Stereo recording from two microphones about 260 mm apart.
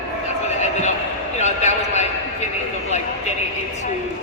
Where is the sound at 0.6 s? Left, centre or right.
Left.